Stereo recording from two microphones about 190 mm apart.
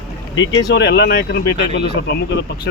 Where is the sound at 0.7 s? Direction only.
65° left (ahead or behind).